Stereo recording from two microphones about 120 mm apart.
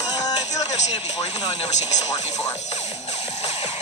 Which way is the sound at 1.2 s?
35° left (ahead or behind).